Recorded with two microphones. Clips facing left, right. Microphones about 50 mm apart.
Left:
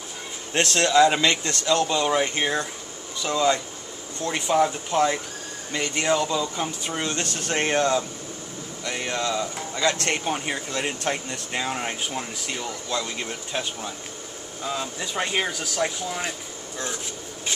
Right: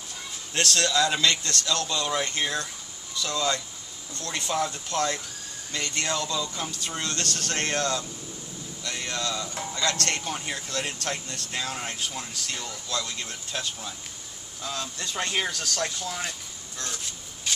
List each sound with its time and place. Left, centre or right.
0.5 s speech: left